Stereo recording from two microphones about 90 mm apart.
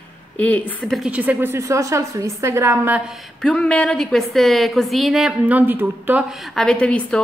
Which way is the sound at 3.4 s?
10° left (ahead or behind).